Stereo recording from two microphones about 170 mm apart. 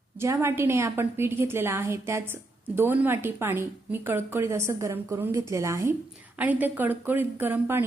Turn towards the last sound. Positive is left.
turn(degrees=-15)  # may be behind; listen again after turning